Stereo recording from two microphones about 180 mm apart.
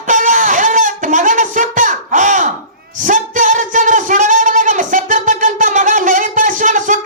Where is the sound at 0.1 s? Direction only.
45° right (ahead or behind).